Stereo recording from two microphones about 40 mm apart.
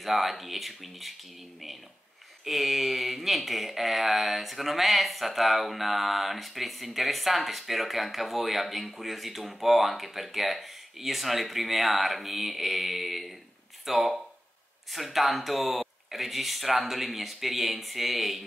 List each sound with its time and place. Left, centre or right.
0.0 s speech: centre
2.4 s speech: centre